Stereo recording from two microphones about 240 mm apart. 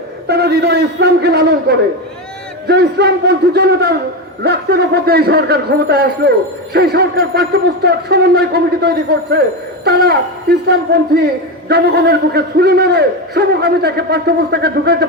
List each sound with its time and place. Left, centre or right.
0.3 s a man's voice: right